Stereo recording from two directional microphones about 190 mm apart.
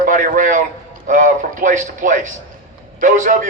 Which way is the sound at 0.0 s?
45° right (ahead or behind).